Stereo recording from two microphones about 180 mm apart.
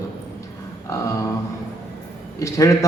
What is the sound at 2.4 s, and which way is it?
Speech, 15° left (ahead or behind).